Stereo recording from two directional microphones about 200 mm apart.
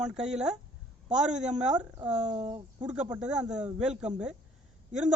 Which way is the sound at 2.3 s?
25° right (ahead or behind).